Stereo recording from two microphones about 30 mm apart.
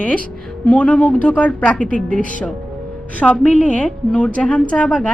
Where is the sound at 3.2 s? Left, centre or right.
Centre.